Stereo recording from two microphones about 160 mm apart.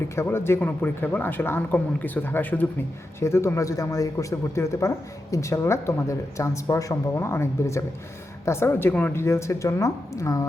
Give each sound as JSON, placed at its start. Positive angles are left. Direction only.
{"t": 0.2, "sound": "speech", "side_deg": 15}